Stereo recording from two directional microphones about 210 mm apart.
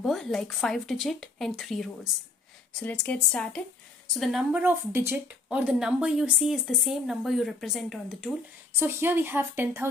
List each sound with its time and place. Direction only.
0.0 s a woman's voice: centre (ahead or behind)